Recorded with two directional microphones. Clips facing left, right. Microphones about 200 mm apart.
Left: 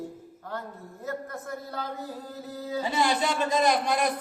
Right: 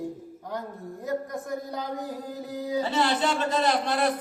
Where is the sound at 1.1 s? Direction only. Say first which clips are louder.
Right 4 dB; 15° right (ahead or behind).